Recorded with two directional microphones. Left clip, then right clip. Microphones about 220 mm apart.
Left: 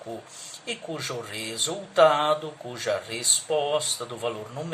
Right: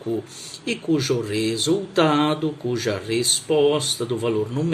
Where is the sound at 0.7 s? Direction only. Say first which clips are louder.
Right 10 dB; 20° right (ahead or behind).